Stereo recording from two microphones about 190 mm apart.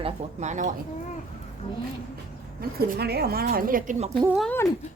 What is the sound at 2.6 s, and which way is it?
Speech, 55° right (ahead or behind).